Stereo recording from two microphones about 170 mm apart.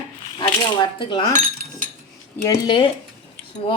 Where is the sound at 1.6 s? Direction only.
50° right (ahead or behind).